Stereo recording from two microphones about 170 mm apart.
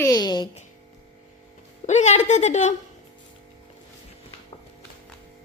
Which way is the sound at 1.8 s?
45° left (ahead or behind).